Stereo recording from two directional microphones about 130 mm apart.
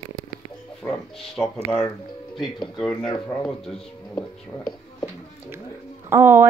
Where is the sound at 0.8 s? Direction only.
5° left (ahead or behind).